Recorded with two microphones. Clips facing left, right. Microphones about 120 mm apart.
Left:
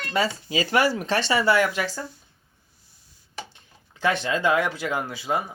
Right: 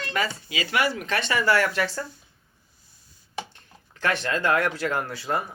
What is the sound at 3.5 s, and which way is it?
Speech, 15° left (ahead or behind).